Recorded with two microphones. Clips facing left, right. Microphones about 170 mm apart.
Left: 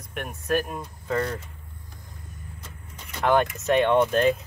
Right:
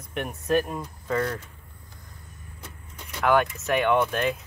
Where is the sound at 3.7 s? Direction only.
30° left (ahead or behind).